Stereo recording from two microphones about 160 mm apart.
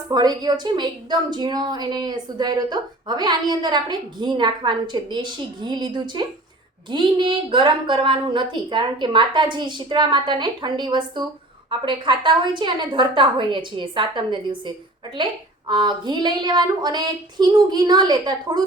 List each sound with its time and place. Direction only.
0.1 s a woman's voice: 25° right (ahead or behind)